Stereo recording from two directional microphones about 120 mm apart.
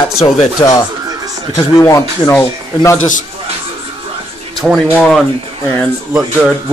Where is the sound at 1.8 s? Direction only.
25° left (ahead or behind).